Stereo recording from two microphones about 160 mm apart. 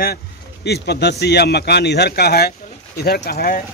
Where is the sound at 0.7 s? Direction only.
90° left.